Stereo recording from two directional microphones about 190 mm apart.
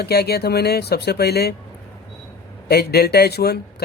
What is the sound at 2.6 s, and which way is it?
Speech, 55° left (ahead or behind).